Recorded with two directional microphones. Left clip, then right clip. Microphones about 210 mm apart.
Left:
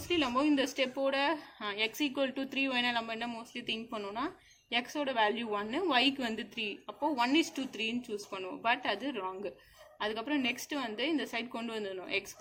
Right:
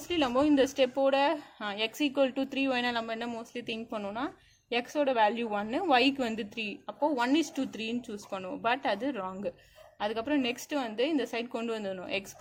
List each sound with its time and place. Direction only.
0.1 s a woman's voice: 45° right (ahead or behind)